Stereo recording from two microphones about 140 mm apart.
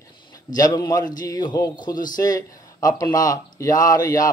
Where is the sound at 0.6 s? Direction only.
25° left (ahead or behind).